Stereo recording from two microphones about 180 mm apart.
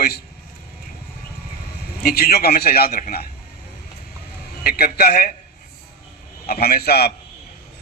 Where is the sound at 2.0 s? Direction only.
60° left (ahead or behind).